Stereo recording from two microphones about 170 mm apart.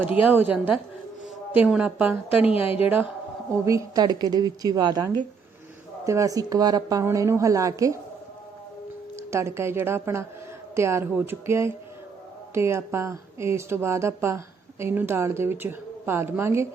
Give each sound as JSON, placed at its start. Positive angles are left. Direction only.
{"t": 0.0, "sound": "a woman's voice", "side_deg": -10}
{"t": 9.3, "sound": "speech", "side_deg": -15}